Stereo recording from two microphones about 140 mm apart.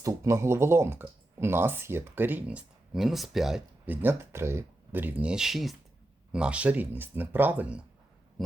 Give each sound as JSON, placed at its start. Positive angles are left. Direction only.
{"t": 0.0, "sound": "speech", "side_deg": -20}
{"t": 3.8, "sound": "speech", "side_deg": -15}
{"t": 8.4, "sound": "a sound", "side_deg": 0}